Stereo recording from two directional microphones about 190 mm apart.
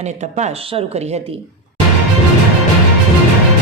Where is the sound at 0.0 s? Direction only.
35° right (ahead or behind).